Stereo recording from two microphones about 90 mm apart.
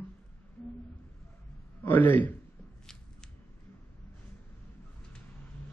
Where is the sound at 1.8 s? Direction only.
20° left (ahead or behind).